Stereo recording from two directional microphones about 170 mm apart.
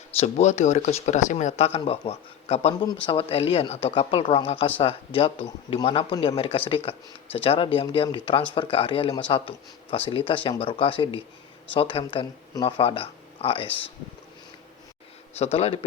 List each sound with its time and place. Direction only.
0.2 s speech: 40° left (ahead or behind)
15.4 s speech: 35° left (ahead or behind)